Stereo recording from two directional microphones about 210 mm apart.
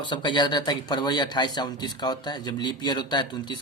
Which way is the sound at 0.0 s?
20° left (ahead or behind).